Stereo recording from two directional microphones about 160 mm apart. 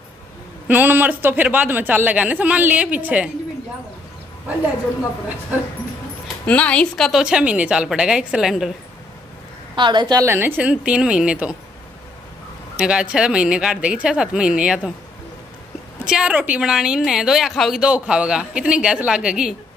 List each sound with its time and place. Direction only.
0.7 s a man's voice: 10° right (ahead or behind)
6.2 s a woman's voice: 10° left (ahead or behind)
9.8 s a woman's voice: 30° right (ahead or behind)
10.2 s a man's voice: 15° right (ahead or behind)
12.7 s a woman's voice: 5° right (ahead or behind)
16.1 s a woman's voice: 5° right (ahead or behind)